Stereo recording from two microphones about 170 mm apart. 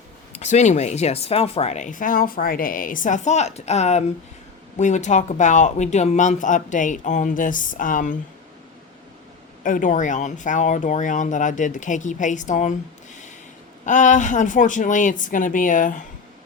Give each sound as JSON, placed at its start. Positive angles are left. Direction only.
{"t": 0.3, "sound": "speech", "side_deg": 45}
{"t": 9.6, "sound": "speech", "side_deg": 50}
{"t": 13.8, "sound": "speech", "side_deg": 45}